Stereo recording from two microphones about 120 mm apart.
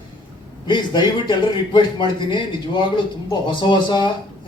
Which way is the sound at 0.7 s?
40° left (ahead or behind).